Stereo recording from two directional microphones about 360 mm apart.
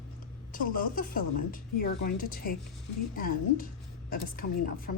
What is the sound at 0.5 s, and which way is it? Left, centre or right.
Speech, left.